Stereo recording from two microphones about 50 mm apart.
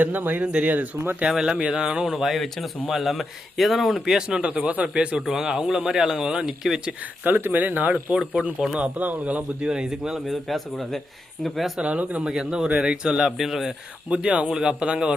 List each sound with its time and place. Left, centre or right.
0.0 s speech: right
1.3 s speech: centre
5.2 s speech: centre
7.3 s speech: right
8.1 s speech: right
8.8 s speech: right; by 10.2 s centre
10.2 s speech: centre
11.8 s speech: right
12.3 s speech: centre
13.3 s speech: centre
14.1 s speech: right